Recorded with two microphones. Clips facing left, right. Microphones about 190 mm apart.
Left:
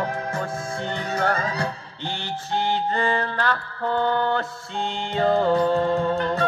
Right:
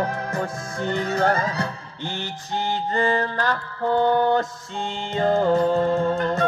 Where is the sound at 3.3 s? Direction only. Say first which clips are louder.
Right 1 dB; 15° right (ahead or behind).